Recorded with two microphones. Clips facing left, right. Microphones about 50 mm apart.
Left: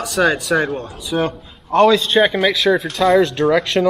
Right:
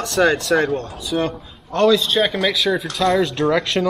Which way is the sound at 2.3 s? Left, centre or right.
Centre.